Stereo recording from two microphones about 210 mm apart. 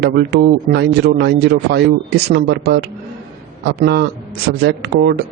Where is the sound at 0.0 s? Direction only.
50° right (ahead or behind).